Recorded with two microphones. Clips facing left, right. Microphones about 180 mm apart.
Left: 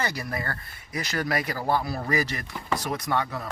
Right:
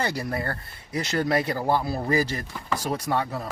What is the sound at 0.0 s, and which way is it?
Speech, 30° right (ahead or behind).